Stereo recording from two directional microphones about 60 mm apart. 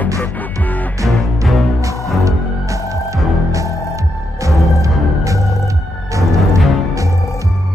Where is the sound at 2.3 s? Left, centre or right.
Right.